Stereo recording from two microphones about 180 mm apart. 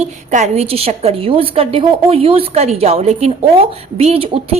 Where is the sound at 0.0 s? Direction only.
40° right (ahead or behind).